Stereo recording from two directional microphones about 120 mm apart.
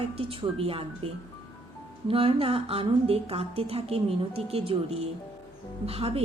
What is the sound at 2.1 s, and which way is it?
A woman's voice, 50° right (ahead or behind).